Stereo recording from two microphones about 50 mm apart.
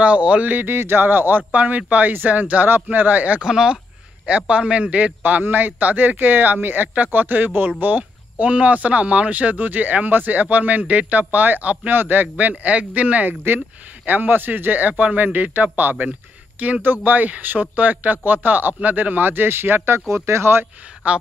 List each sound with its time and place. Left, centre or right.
0.0 s a man's voice: right
0.7 s speech: right
3.3 s speech: centre
4.3 s a man's voice: right
11.9 s speech: right
16.1 s a sound: right
16.8 s speech: right
20.2 s speech: right